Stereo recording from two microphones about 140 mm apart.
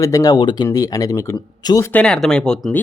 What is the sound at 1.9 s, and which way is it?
Speech, 5° left (ahead or behind).